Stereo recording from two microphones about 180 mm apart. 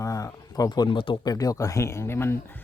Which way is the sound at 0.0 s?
20° left (ahead or behind).